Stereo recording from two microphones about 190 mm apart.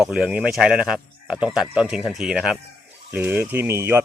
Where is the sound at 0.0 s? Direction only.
5° right (ahead or behind).